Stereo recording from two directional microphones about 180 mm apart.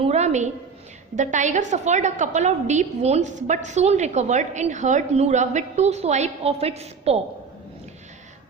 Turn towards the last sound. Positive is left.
turn(degrees=-35)  # may be behind; listen again after turning